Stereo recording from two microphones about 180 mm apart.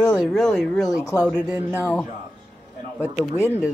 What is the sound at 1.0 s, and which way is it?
Speech, 20° left (ahead or behind).